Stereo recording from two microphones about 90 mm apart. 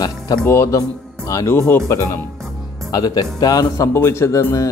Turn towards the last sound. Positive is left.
turn(degrees=35)  # may be behind; listen again after turning